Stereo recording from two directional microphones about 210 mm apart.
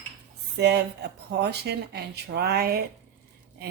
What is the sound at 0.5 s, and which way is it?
Speech, 55° right (ahead or behind).